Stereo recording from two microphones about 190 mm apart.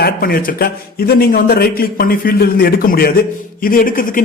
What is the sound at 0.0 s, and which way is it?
Speech, 50° left (ahead or behind).